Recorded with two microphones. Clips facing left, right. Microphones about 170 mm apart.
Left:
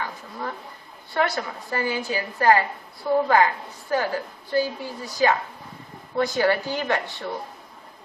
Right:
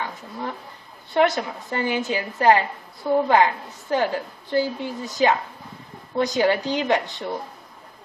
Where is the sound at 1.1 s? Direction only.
20° right (ahead or behind).